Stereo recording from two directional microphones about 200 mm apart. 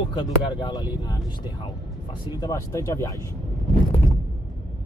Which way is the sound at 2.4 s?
15° left (ahead or behind).